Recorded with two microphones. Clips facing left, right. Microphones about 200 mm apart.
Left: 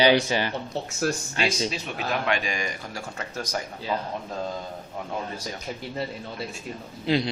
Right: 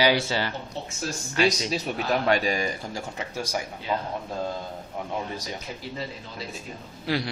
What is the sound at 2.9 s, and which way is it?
Speech, 15° right (ahead or behind).